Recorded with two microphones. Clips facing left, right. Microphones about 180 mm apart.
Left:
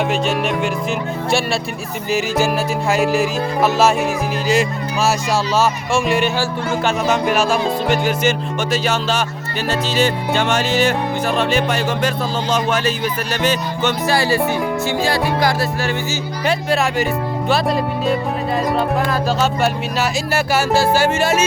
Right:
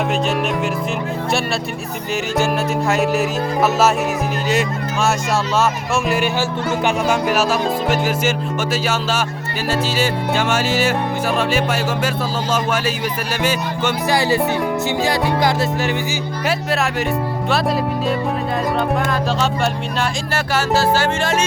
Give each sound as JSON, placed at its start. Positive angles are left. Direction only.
{"t": 0.1, "sound": "music", "side_deg": 0}
{"t": 2.9, "sound": "music", "side_deg": 0}
{"t": 6.4, "sound": "speech", "side_deg": -15}
{"t": 7.3, "sound": "music", "side_deg": -5}
{"t": 9.6, "sound": "speech", "side_deg": -5}
{"t": 16.5, "sound": "music", "side_deg": 0}
{"t": 19.4, "sound": "speech", "side_deg": 5}